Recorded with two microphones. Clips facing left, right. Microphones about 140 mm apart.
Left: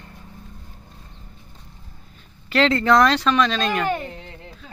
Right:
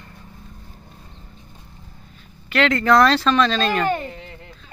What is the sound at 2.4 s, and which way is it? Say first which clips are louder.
Speech: left 1 dB; 35° left (ahead or behind).